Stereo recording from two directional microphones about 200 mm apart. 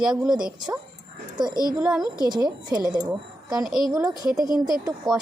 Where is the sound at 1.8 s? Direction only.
5° right (ahead or behind).